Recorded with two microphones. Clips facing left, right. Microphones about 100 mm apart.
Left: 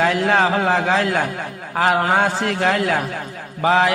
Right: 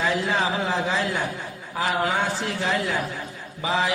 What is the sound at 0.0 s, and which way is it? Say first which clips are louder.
A man's voice: left 7 dB; 65° left (ahead or behind).